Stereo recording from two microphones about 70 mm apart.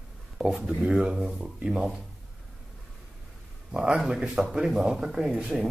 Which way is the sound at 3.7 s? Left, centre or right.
Centre.